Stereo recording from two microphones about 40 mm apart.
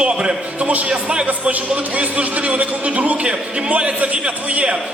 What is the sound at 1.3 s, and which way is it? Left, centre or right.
Speech, right.